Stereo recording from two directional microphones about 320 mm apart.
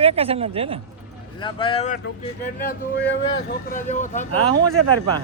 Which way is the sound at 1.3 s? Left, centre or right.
Centre.